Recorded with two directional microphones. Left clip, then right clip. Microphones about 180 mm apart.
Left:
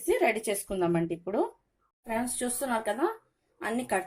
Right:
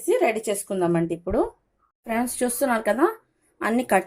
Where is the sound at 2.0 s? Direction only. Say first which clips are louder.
Right 7 dB; 20° right (ahead or behind).